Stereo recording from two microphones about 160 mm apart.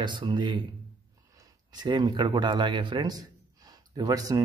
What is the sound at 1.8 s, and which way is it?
Speech, 25° right (ahead or behind).